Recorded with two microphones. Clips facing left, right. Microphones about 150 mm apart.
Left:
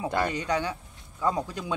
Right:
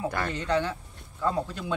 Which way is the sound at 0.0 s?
15° left (ahead or behind).